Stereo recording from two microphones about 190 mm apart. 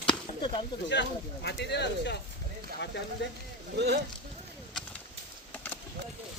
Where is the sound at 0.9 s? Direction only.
65° left (ahead or behind).